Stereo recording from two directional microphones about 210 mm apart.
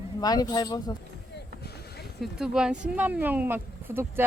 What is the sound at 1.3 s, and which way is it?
Vehicle, 50° left (ahead or behind).